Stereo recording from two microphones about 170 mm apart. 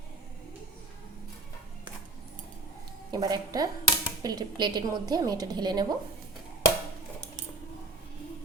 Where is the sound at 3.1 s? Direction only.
25° right (ahead or behind).